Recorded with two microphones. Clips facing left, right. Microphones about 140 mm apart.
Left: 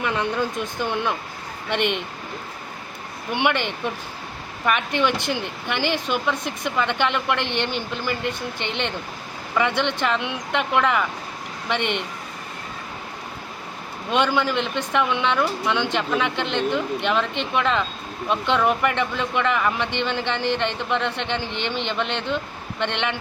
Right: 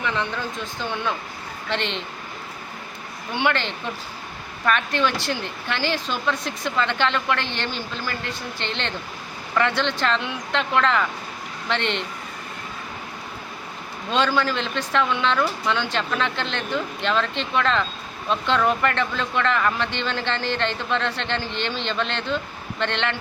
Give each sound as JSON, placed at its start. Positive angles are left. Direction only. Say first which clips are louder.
{"t": 1.7, "sound": "speech", "louder": "left 4 dB", "side_deg": 15}
{"t": 3.3, "sound": "speech", "louder": "left 1 dB", "side_deg": 15}
{"t": 14.1, "sound": "speech", "louder": "left 1 dB", "side_deg": 15}